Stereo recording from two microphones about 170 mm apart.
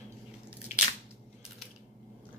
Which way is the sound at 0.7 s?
45° left (ahead or behind).